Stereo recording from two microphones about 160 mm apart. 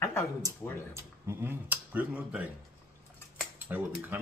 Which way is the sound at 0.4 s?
20° right (ahead or behind).